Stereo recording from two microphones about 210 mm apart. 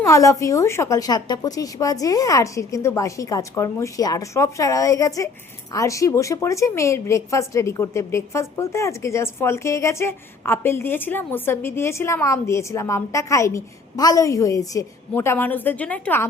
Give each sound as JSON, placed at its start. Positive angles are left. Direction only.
{"t": 0.0, "sound": "a woman's voice", "side_deg": 15}